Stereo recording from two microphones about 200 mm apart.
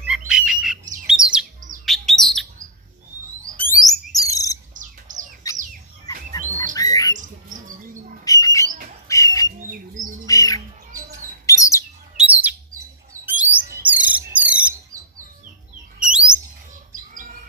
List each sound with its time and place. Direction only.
0.0 s bird: 5° right (ahead or behind)
3.8 s music: 15° left (ahead or behind)
5.1 s bird: 40° right (ahead or behind)
6.1 s chirp: 40° right (ahead or behind)
6.7 s bird: 20° left (ahead or behind)
8.3 s bird: 15° left (ahead or behind)
9.0 s a sound: 15° left (ahead or behind)
9.6 s bird: 40° right (ahead or behind)
10.2 s bird: 15° left (ahead or behind)
12.2 s chirp: 10° right (ahead or behind)
13.9 s bird: 5° right (ahead or behind)
16.0 s chirp: 5° right (ahead or behind)
16.9 s bird: 40° right (ahead or behind)